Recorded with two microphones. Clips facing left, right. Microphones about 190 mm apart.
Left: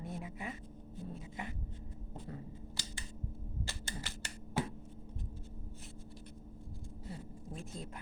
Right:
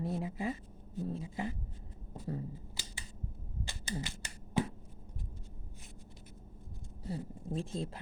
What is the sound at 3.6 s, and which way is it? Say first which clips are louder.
Computer keyboard: right 5 dB; 15° right (ahead or behind).